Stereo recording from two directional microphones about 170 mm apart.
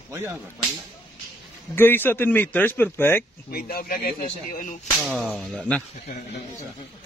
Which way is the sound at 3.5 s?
65° left (ahead or behind).